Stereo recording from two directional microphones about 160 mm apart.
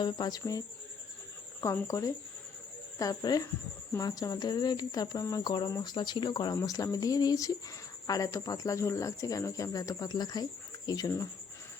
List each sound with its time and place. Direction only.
0.0 s speech: 25° left (ahead or behind)
1.6 s speech: 20° left (ahead or behind)